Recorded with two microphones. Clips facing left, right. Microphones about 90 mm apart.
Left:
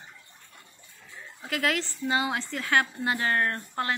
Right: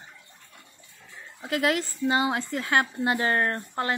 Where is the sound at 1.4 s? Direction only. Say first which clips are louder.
Right 3 dB; 25° right (ahead or behind).